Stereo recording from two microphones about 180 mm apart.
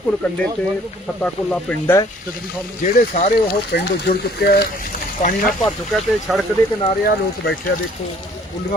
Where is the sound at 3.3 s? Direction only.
60° left (ahead or behind).